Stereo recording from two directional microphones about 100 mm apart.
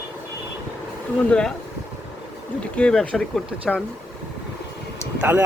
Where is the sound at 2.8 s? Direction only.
10° left (ahead or behind).